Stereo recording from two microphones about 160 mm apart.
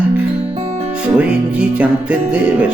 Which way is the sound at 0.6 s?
40° right (ahead or behind).